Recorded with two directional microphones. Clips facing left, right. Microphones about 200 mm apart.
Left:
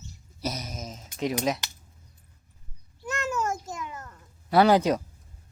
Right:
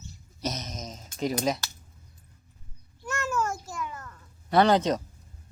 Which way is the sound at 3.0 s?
20° left (ahead or behind).